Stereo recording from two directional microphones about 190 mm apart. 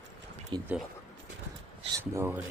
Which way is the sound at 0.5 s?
25° right (ahead or behind).